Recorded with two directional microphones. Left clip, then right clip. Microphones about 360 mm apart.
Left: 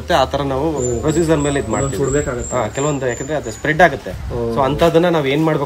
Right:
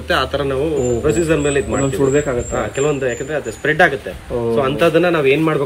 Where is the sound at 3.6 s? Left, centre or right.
Left.